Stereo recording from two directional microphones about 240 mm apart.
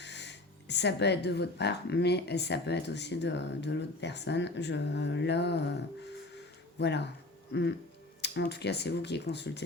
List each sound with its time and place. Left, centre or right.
0.0 s speech: left
6.3 s a sound: left
8.2 s speech: left